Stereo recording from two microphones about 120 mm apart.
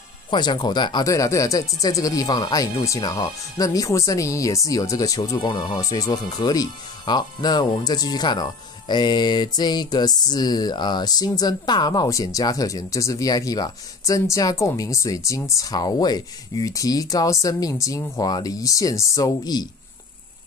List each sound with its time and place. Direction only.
0.3 s speech: 40° left (ahead or behind)
1.0 s speech: 25° left (ahead or behind)